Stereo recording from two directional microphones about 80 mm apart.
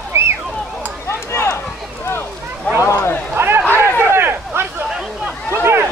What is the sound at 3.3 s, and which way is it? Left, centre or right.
Speech, right.